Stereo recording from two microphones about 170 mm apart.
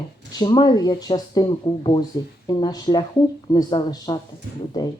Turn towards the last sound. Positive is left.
turn(degrees=25)  # may be behind; listen again after turning